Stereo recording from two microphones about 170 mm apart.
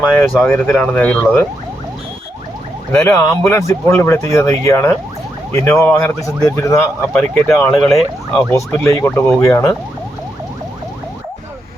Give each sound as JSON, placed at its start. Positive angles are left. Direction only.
{"t": 0.3, "sound": "speech", "side_deg": 0}
{"t": 0.5, "sound": "speech", "side_deg": 10}
{"t": 3.2, "sound": "speech", "side_deg": 15}
{"t": 8.5, "sound": "speech", "side_deg": 15}